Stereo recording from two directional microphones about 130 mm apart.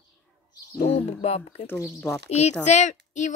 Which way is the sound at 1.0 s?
50° left (ahead or behind).